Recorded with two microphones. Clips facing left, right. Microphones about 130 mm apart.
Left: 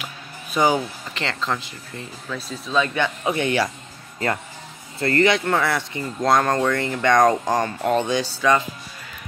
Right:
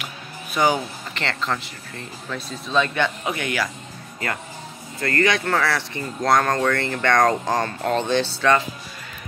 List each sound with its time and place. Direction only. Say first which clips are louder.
0.6 s speech: left 1 dB; 15° left (ahead or behind)
3.3 s speech: left 4 dB; 25° left (ahead or behind)
5.0 s speech: left 3 dB; 25° left (ahead or behind)